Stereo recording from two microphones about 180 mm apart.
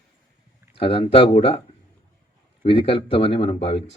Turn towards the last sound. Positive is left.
turn(degrees=30)  # may be behind; listen again after turning